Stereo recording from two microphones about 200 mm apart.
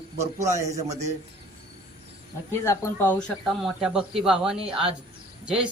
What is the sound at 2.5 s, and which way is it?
Speech, 15° left (ahead or behind).